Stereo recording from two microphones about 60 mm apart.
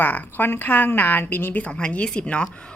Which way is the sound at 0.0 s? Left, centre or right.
Left.